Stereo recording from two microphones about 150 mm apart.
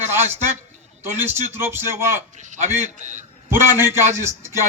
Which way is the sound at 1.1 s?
15° right (ahead or behind).